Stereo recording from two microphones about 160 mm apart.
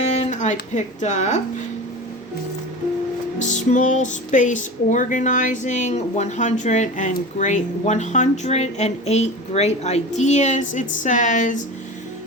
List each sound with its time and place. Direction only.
0.0 s speech: 40° left (ahead or behind)
3.3 s music: 50° left (ahead or behind)